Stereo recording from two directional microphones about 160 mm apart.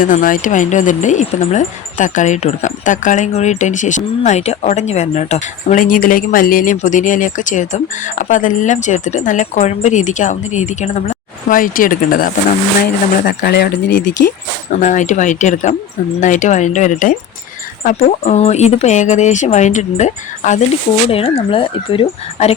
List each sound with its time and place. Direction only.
0.0 s speech: 55° left (ahead or behind)
12.8 s speech: 80° left
14.8 s speech: 50° left (ahead or behind)
21.1 s speech: 35° left (ahead or behind)